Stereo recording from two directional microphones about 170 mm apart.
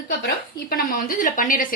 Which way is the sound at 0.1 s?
65° left (ahead or behind).